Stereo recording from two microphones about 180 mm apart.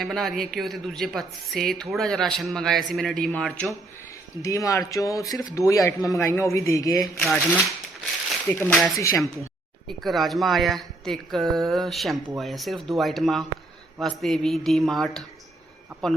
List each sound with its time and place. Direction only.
0.0 s a woman's voice: centre (ahead or behind)
4.4 s speech: 15° left (ahead or behind)
7.2 s a woman's voice: 10° left (ahead or behind)
9.0 s speech: 15° left (ahead or behind)
10.0 s a woman's voice: centre (ahead or behind)